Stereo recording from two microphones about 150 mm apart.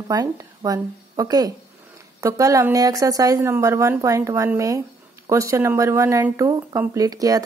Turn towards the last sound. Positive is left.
turn(degrees=-25)  # may be behind; listen again after turning